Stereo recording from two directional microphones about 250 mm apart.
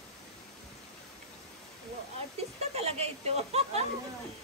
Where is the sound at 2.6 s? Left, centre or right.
Right.